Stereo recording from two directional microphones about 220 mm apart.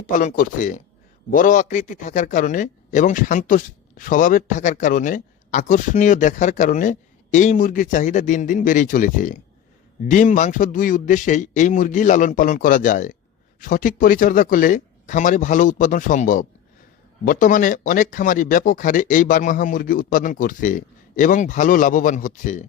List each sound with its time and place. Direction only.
0.2 s speech: 35° left (ahead or behind)